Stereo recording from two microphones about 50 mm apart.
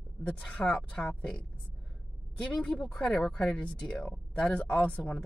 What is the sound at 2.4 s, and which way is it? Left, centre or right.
Speech, left.